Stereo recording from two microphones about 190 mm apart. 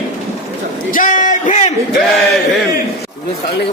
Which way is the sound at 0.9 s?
45° left (ahead or behind).